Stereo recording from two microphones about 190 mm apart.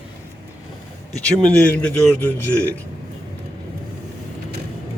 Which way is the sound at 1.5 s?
5° left (ahead or behind).